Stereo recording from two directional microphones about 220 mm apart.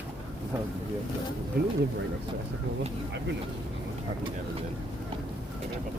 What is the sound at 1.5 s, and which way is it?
Speech, 45° right (ahead or behind).